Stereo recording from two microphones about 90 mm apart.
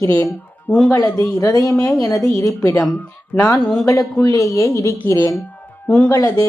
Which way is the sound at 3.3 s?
20° left (ahead or behind).